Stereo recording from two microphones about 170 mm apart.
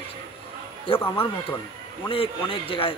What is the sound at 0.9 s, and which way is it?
Speech, 15° left (ahead or behind).